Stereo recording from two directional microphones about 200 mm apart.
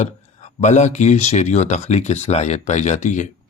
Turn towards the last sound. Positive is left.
turn(degrees=35)  # may be behind; listen again after turning